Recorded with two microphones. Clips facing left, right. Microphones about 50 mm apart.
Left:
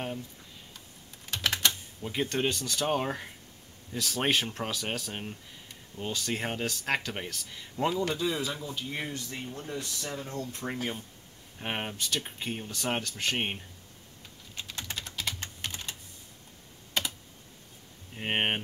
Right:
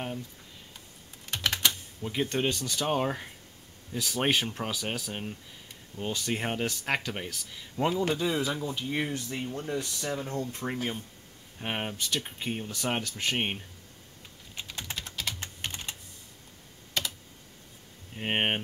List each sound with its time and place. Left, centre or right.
1.6 s typing: centre
2.3 s speech: centre
6.6 s speech: right
6.9 s speech: centre
8.1 s speech: centre
10.6 s speech: centre
14.5 s typing: centre
17.0 s computer keyboard: centre
18.1 s speech: centre